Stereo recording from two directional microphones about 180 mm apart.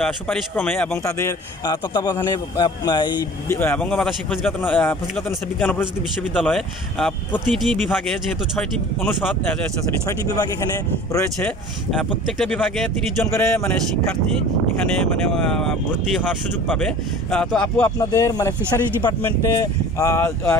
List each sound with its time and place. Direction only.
0.0 s a man's voice: 5° left (ahead or behind); by 3.2 s 25° left (ahead or behind)
3.4 s a man's voice: 10° left (ahead or behind)
9.6 s a man's voice: 20° left (ahead or behind)
12.0 s speech: 5° left (ahead or behind)
13.3 s a man's voice: 15° left (ahead or behind)
15.3 s speech: 5° left (ahead or behind)
17.9 s a man's voice: 15° left (ahead or behind)